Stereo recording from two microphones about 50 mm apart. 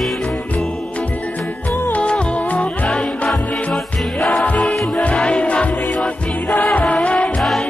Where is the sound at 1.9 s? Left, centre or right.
Left.